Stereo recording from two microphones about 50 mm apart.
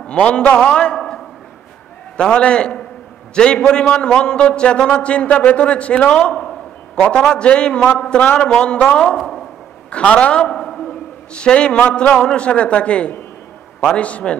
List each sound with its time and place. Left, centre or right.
0.0 s a man's voice: left
0.7 s a man's voice: centre
10.5 s a sound: centre
12.2 s a man's voice: centre